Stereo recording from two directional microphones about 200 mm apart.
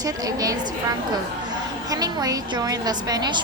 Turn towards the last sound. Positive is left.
turn(degrees=-20)  # may be behind; listen again after turning